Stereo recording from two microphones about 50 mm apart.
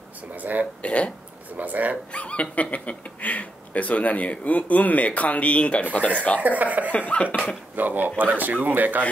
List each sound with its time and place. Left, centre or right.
0.4 s speech: right
0.8 s speech: left
1.6 s speech: right
2.1 s speech: left
6.4 s speech: right
6.9 s speech: left
7.7 s speech: right